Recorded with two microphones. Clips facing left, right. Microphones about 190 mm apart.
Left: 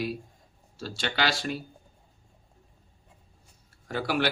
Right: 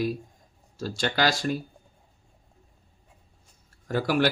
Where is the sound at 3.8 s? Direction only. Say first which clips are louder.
Right 4 dB; 45° right (ahead or behind).